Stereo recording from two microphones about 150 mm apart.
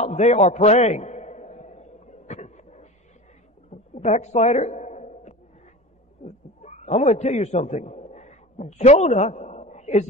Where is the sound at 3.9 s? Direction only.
50° left (ahead or behind).